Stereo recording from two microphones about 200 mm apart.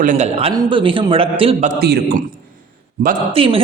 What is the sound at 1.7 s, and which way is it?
Speech, 50° right (ahead or behind).